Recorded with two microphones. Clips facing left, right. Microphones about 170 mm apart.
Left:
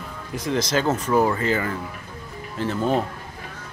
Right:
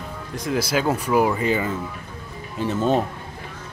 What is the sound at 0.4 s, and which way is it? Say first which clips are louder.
Speech: even; 5° right (ahead or behind).